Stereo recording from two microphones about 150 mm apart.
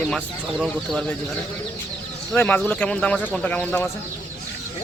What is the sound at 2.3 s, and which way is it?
Speech, 10° left (ahead or behind).